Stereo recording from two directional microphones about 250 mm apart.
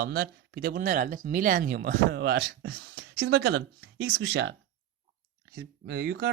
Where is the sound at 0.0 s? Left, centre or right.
Right.